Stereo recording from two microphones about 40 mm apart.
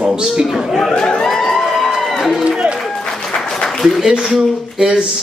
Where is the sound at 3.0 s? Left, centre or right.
Centre.